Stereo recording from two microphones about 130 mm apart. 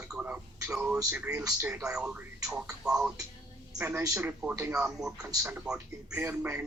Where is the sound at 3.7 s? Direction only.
15° right (ahead or behind).